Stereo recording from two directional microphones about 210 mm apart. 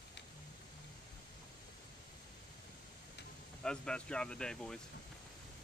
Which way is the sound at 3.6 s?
5° left (ahead or behind).